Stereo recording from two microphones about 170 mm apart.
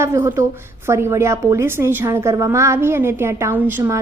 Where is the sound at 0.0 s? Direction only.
20° right (ahead or behind).